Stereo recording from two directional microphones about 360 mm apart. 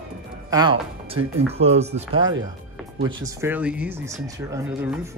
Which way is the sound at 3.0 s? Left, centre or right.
Centre.